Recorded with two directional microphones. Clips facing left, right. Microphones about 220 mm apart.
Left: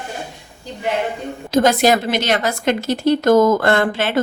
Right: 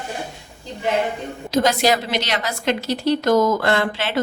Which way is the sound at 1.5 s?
50° left (ahead or behind).